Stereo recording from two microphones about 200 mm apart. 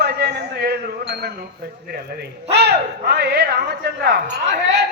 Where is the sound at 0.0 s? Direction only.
55° right (ahead or behind).